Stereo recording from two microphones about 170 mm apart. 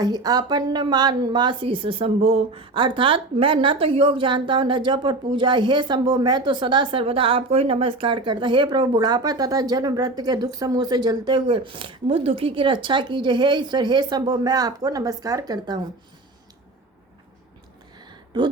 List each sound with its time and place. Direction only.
0.0 s a woman's voice: 20° right (ahead or behind)